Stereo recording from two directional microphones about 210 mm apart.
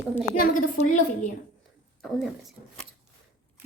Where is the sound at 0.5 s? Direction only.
35° left (ahead or behind).